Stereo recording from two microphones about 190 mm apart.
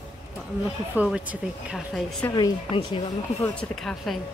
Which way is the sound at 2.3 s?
20° left (ahead or behind).